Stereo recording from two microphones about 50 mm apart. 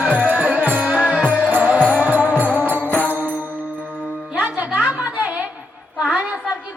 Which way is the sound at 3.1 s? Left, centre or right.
Right.